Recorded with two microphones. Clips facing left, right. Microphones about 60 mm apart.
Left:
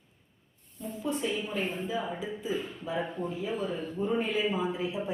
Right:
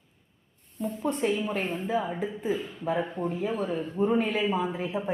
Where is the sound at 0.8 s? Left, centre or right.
Right.